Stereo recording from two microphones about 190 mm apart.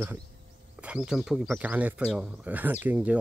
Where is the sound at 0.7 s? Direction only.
5° right (ahead or behind).